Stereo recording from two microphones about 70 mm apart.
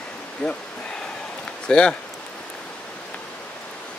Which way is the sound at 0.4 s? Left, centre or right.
Centre.